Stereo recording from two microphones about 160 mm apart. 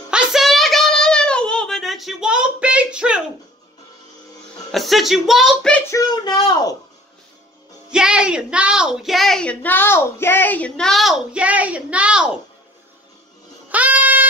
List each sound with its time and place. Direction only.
0.1 s a sound: 5° right (ahead or behind)
4.7 s a woman's voice: centre (ahead or behind)
5.9 s speech: 25° left (ahead or behind)
7.9 s a woman's voice: 5° right (ahead or behind)
13.7 s music: 10° right (ahead or behind)